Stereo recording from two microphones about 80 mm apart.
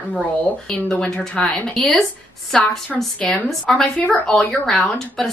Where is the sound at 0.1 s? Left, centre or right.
Centre.